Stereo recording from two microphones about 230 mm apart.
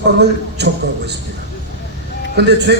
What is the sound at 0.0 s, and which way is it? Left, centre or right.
A man's voice, right.